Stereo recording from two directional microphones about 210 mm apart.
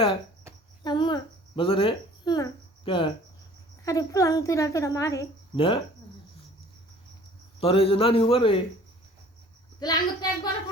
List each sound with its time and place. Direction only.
0.9 s a woman's voice: 20° left (ahead or behind)
5.5 s a man's voice: 25° left (ahead or behind)
7.6 s a man's voice: 25° left (ahead or behind)
9.8 s a man's voice: 20° left (ahead or behind)